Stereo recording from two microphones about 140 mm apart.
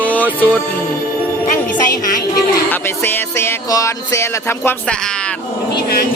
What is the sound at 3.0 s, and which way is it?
Music, 15° left (ahead or behind).